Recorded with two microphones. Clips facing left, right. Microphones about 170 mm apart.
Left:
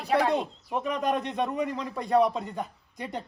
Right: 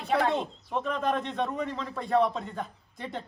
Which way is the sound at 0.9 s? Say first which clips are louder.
Left 1 dB; 15° left (ahead or behind).